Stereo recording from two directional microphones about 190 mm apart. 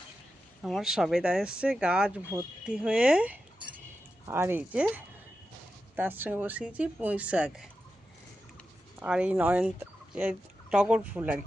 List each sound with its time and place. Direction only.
0.6 s speech: centre (ahead or behind)
9.0 s turkey: 5° right (ahead or behind)